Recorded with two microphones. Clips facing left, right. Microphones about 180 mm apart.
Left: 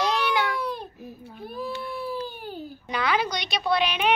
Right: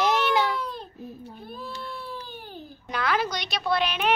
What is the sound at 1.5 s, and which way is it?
Baby cry, 15° left (ahead or behind).